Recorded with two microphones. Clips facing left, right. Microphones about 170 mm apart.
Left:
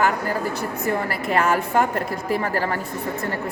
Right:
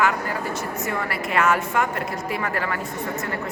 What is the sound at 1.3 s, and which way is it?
A woman's voice, 35° left (ahead or behind).